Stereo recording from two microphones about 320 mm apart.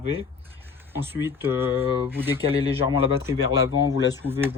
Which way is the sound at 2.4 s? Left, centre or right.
Centre.